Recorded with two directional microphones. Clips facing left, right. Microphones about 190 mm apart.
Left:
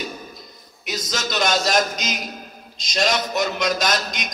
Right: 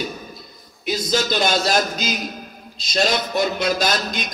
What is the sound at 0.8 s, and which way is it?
A man's voice, 30° right (ahead or behind).